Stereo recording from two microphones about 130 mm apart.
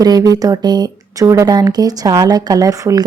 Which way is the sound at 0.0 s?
30° right (ahead or behind).